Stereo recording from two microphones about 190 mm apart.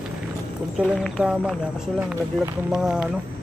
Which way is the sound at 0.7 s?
Centre (ahead or behind).